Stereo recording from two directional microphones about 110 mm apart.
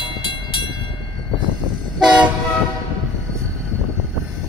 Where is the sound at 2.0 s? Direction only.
10° right (ahead or behind).